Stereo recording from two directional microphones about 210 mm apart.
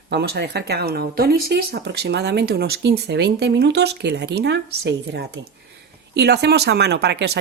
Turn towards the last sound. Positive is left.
turn(degrees=-50)  # may be behind; listen again after turning